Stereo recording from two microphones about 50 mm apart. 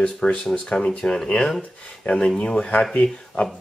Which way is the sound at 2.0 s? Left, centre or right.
Left.